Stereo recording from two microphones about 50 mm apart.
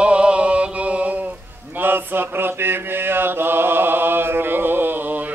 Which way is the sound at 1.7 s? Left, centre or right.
Right.